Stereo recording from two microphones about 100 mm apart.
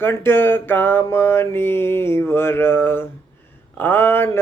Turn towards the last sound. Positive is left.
turn(degrees=20)  # may be behind; listen again after turning